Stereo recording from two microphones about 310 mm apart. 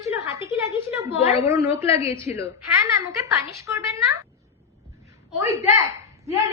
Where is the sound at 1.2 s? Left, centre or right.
Centre.